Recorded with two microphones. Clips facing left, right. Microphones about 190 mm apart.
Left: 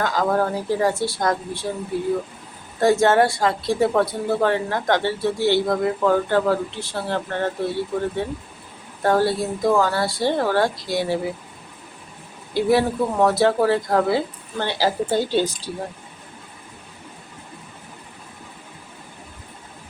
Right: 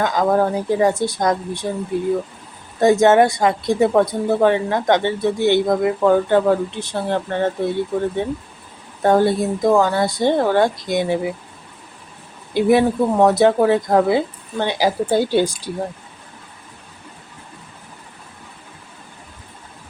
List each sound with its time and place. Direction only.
0.0 s speech: 20° right (ahead or behind)
2.8 s speech: 20° right (ahead or behind)
12.5 s speech: 20° right (ahead or behind)